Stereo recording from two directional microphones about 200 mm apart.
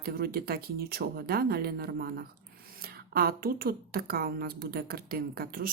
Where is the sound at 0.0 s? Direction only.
50° right (ahead or behind).